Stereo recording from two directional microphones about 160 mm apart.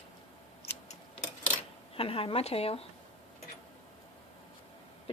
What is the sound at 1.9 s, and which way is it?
Speech, 35° left (ahead or behind).